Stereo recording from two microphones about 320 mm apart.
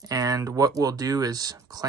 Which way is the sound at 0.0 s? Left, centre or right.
Centre.